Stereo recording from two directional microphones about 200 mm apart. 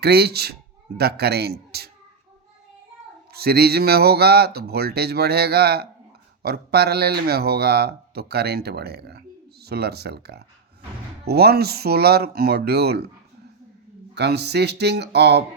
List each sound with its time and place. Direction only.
0.0 s speech: 55° right (ahead or behind)
3.3 s speech: 50° right (ahead or behind)
14.2 s speech: 55° right (ahead or behind)